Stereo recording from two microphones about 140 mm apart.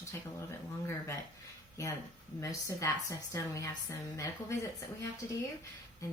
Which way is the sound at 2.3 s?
25° left (ahead or behind).